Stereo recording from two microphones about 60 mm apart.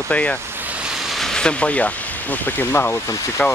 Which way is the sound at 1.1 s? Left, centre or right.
Centre.